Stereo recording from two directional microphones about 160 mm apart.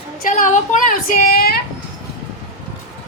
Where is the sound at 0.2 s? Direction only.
55° left (ahead or behind); by 1.6 s 70° left (ahead or behind).